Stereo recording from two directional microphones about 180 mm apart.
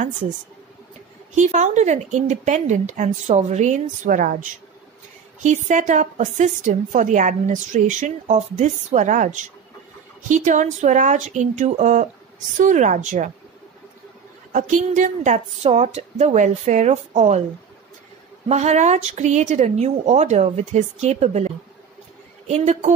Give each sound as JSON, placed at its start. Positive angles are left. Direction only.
{"t": 1.3, "sound": "a woman's voice", "side_deg": -40}
{"t": 14.5, "sound": "speech", "side_deg": -45}
{"t": 18.5, "sound": "speech", "side_deg": -40}